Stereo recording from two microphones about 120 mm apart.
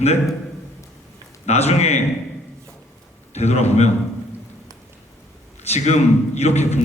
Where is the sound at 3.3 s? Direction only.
65° left (ahead or behind).